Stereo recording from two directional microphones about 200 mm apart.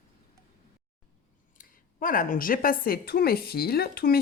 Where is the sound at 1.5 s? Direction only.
45° left (ahead or behind).